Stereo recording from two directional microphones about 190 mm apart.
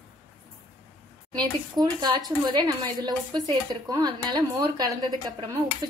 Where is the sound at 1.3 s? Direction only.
20° right (ahead or behind).